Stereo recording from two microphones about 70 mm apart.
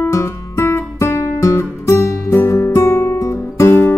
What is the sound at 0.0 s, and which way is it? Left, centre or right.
Music, left.